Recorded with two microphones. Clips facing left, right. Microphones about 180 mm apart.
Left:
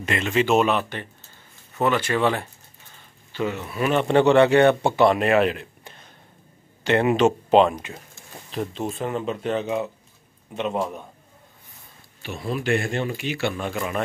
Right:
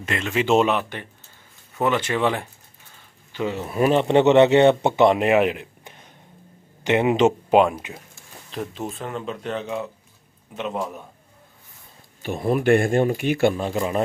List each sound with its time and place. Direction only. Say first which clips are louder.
0.0 s speech: left 1 dB; 5° left (ahead or behind)
0.5 s speech: right 2 dB; 25° right (ahead or behind)
0.7 s speech: even; 15° right (ahead or behind)
12.2 s speech: right 6 dB; 50° right (ahead or behind)
13.7 s speech: right 4 dB; 30° right (ahead or behind)